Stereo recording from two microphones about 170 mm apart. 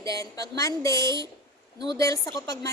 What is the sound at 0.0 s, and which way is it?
A woman's voice, 20° left (ahead or behind).